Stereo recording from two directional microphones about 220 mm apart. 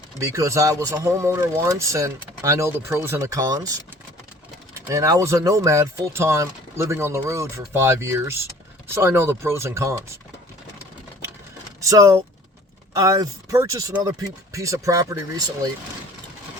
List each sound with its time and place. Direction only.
0.2 s speech: 15° right (ahead or behind)
4.9 s speech: 15° right (ahead or behind)
11.8 s speech: 15° right (ahead or behind)